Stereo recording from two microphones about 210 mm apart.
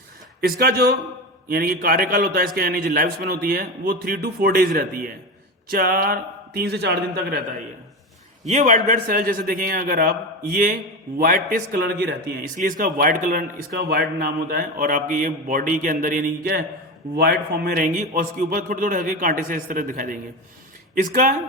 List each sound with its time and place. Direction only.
0.4 s a man's voice: 45° right (ahead or behind)
8.4 s a man's voice: 35° right (ahead or behind)